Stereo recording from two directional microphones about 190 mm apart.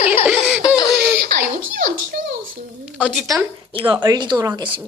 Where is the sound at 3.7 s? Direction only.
25° right (ahead or behind).